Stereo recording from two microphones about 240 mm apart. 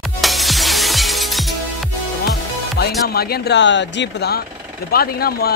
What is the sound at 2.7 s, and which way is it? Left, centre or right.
Speech, left.